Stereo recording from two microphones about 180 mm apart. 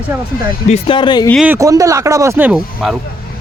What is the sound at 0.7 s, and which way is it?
Speech, 30° left (ahead or behind).